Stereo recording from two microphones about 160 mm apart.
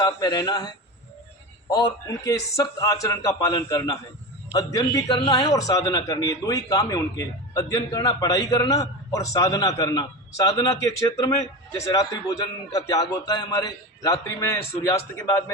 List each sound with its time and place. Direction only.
0.0 s a man's voice: 25° left (ahead or behind)
1.7 s a man's voice: 25° left (ahead or behind)
11.9 s a man's voice: 20° left (ahead or behind)